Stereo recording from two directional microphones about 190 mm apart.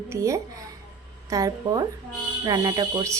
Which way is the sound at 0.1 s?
15° right (ahead or behind).